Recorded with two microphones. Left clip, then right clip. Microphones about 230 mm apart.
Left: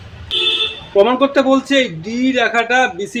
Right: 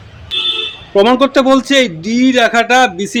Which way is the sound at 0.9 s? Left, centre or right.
Right.